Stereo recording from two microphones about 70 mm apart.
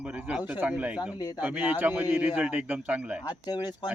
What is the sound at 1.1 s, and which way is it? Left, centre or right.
Speech, left.